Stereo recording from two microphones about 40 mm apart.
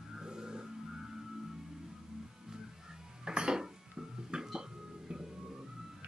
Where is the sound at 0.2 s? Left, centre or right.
Centre.